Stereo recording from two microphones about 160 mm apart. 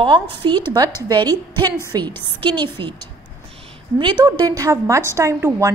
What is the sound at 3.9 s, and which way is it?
A woman's voice, 30° right (ahead or behind).